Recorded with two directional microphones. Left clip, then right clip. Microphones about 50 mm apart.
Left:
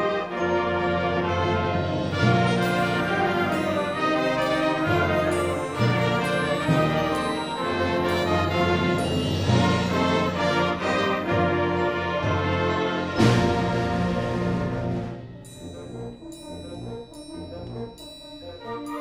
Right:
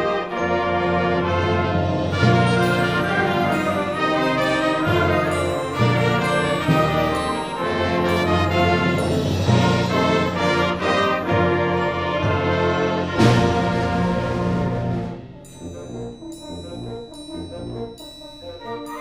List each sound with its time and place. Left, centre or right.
0.0 s music: right
3.4 s music: right